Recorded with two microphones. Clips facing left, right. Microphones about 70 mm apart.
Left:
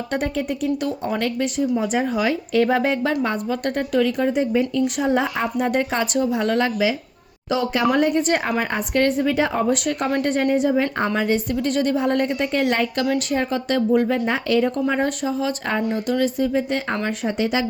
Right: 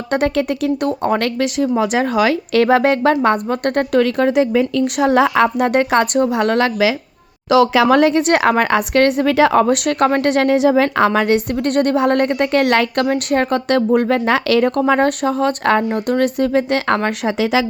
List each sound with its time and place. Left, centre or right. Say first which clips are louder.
0.1 s speech: right 8 dB; right
0.9 s speech: right 6 dB; right
7.5 s speech: right 8 dB; right
13.1 s speech: right 5 dB; right